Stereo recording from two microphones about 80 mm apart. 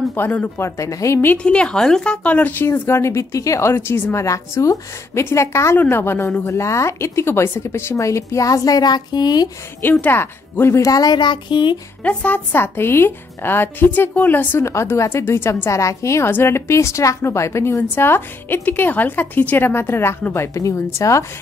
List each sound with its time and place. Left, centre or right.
0.1 s a woman's voice: left
0.7 s a woman's voice: left
1.2 s a woman's voice: centre; by 9.5 s left
9.8 s a woman's voice: left
10.8 s speech: left
12.0 s a woman's voice: centre
12.5 s a woman's voice: left
14.6 s a woman's voice: left